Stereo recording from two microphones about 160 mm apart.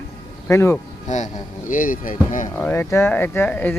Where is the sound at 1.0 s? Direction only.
50° left (ahead or behind).